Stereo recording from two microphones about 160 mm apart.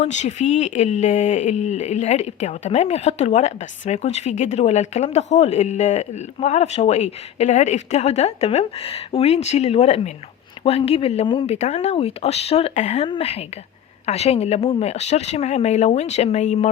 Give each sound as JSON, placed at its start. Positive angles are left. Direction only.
{"t": 0.0, "sound": "speech", "side_deg": 45}